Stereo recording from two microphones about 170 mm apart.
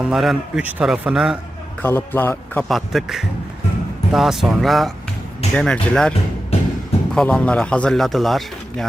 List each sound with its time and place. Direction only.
0.0 s speech: centre (ahead or behind)
1.8 s a man's voice: 10° left (ahead or behind)
2.6 s speech: centre (ahead or behind)
6.5 s music: 35° left (ahead or behind)
7.1 s speech: 5° left (ahead or behind)